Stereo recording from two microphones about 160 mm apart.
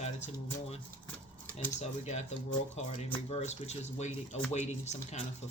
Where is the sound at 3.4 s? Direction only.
45° left (ahead or behind).